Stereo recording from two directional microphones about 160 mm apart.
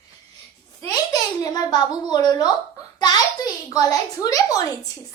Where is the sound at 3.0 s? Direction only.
25° left (ahead or behind).